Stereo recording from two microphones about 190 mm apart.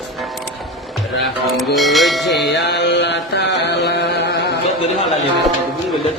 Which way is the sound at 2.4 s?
65° left (ahead or behind).